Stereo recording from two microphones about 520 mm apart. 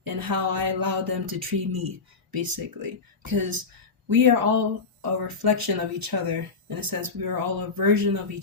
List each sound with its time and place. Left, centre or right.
0.0 s speech: right